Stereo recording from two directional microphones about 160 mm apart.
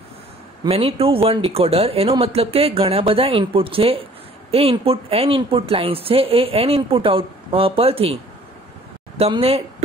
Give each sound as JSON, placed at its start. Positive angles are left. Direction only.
{"t": 0.7, "sound": "speech", "side_deg": -35}
{"t": 9.2, "sound": "speech", "side_deg": -40}